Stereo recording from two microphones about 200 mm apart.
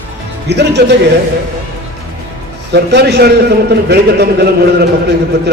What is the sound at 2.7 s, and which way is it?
A man's voice, 55° right (ahead or behind).